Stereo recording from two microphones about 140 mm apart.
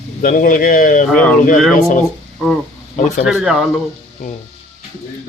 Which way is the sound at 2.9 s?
60° left (ahead or behind).